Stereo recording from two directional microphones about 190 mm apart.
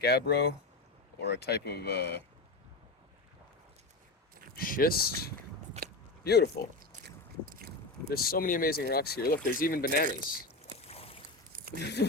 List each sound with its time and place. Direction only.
0.0 s speech: 60° left (ahead or behind)
4.5 s speech: 50° left (ahead or behind)
5.8 s biting: 35° right (ahead or behind)
6.2 s speech: 60° left (ahead or behind)
7.6 s biting: 55° right (ahead or behind)
8.1 s speech: 50° left (ahead or behind)
10.8 s boat: 30° left (ahead or behind)
11.5 s a sound: 50° right (ahead or behind)
11.8 s speech: 60° left (ahead or behind)